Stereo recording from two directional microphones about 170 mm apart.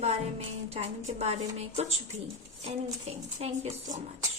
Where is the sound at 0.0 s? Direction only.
40° right (ahead or behind).